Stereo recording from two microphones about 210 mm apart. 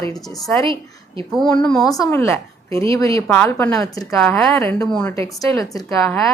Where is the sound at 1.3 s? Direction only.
Centre (ahead or behind).